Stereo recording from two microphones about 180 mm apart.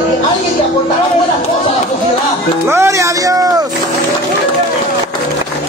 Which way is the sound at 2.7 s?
15° right (ahead or behind).